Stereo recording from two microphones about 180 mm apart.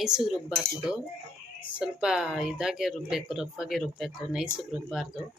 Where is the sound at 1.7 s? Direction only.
5° right (ahead or behind).